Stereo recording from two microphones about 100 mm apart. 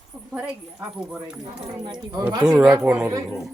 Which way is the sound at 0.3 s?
15° right (ahead or behind).